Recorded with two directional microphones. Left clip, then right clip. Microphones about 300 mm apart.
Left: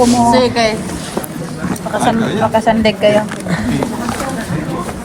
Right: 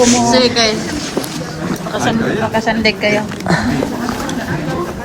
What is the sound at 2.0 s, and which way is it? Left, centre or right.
Speech, left.